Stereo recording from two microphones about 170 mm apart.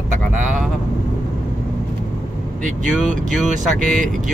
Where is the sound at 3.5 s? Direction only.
50° right (ahead or behind).